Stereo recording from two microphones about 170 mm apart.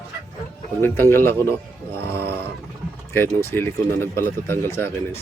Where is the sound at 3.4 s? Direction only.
15° left (ahead or behind).